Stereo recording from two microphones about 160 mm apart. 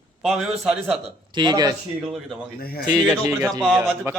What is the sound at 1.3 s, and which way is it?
Speech, 30° right (ahead or behind).